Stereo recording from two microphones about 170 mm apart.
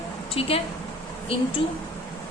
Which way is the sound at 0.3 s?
35° left (ahead or behind).